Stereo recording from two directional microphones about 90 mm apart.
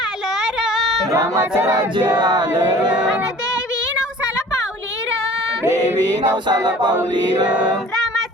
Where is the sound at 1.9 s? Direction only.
55° right (ahead or behind).